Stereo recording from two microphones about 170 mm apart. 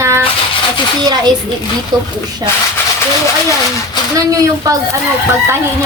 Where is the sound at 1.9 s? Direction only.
25° right (ahead or behind).